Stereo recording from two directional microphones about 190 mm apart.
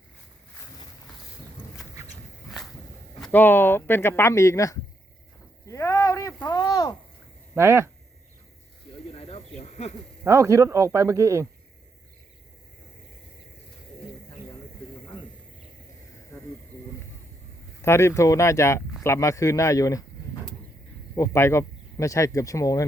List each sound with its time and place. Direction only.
3.2 s a man's voice: 5° left (ahead or behind)
5.6 s a sound: 15° left (ahead or behind)
7.5 s speech: 15° right (ahead or behind)
9.1 s snake: 30° left (ahead or behind)
10.2 s speech: 15° right (ahead or behind)
15.0 s snake: 25° left (ahead or behind)
16.3 s snake: 15° left (ahead or behind)
17.8 s a man's voice: 15° left (ahead or behind)
21.2 s a man's voice: 15° left (ahead or behind)